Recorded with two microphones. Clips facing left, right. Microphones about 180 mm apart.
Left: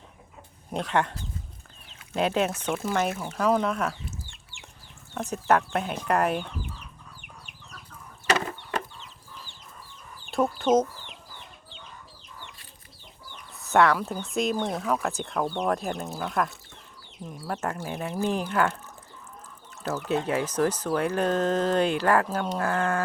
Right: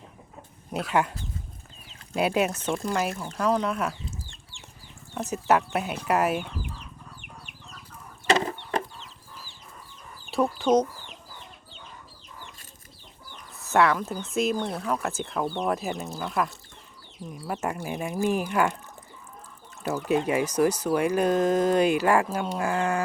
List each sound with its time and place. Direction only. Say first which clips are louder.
0.7 s speech: right 1 dB; 5° right (ahead or behind)
2.1 s speech: right 1 dB; 10° right (ahead or behind)
2.6 s speech: even; centre (ahead or behind)
8.3 s chicken: right 3 dB; 25° right (ahead or behind)
10.3 s speech: even; centre (ahead or behind)
13.6 s speech: left 1 dB; centre (ahead or behind)
20.1 s speech: right 3 dB; 10° right (ahead or behind)